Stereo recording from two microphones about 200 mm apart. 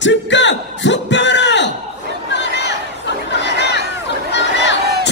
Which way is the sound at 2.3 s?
60° left (ahead or behind).